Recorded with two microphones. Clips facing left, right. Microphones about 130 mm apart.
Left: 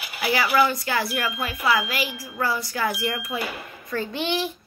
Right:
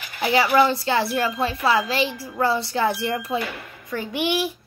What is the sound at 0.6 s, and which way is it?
Speech, 25° right (ahead or behind).